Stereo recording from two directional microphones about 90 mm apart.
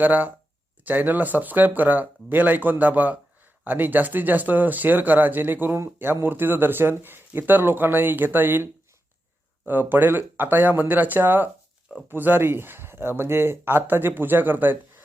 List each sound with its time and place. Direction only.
0.0 s speech: 20° right (ahead or behind)